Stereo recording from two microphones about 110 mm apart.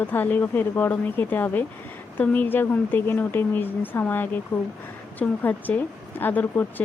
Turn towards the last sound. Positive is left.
turn(degrees=20)  # may be behind; listen again after turning